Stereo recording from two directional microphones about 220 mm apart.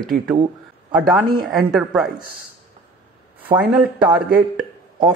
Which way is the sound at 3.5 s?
5° right (ahead or behind).